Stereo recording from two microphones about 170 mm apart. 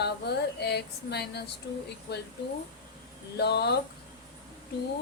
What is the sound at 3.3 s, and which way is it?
Speech, 75° left (ahead or behind).